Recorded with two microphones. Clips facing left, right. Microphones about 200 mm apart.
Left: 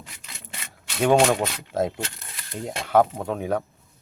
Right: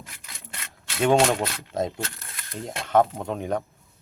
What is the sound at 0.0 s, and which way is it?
Wood, centre (ahead or behind).